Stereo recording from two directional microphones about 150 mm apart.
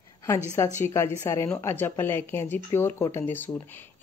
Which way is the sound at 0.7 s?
15° left (ahead or behind).